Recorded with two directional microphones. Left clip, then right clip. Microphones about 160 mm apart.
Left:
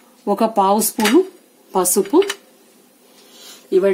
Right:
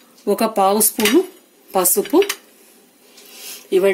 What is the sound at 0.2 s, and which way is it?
Speech, 40° left (ahead or behind).